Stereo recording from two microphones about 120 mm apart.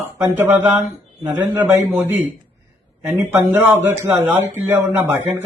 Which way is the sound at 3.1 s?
20° right (ahead or behind).